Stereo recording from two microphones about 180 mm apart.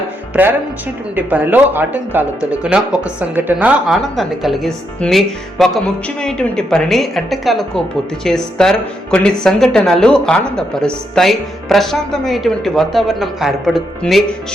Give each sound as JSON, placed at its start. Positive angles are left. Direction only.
{"t": 1.1, "sound": "speech", "side_deg": -10}